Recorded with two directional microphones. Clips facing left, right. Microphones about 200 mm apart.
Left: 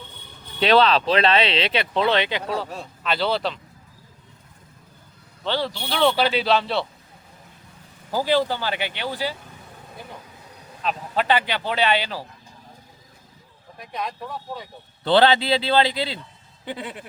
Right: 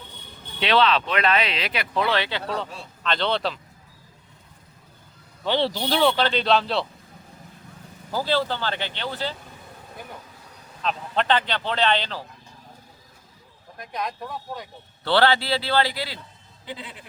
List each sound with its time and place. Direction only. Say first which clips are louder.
0.6 s speech: left 3 dB; 40° left (ahead or behind); by 2.5 s 20° left (ahead or behind)
3.0 s speech: left 1 dB; 5° left (ahead or behind)
5.5 s speech: right 2 dB; 10° right (ahead or behind)
6.1 s speech: left 1 dB; 10° left (ahead or behind)
8.1 s speech: left 3 dB; 15° left (ahead or behind)
10.8 s speech: left 1 dB; 5° left (ahead or behind)
13.7 s speech: even; centre (ahead or behind)
15.0 s speech: left 3 dB; 20° left (ahead or behind)
16.6 s a sound: left 5 dB; 60° left (ahead or behind)